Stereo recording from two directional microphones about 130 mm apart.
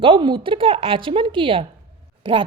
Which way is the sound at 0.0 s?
40° right (ahead or behind).